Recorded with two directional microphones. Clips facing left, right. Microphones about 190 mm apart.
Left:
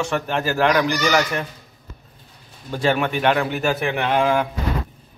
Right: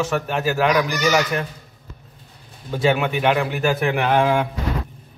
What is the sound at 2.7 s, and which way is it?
A man's voice, 5° right (ahead or behind).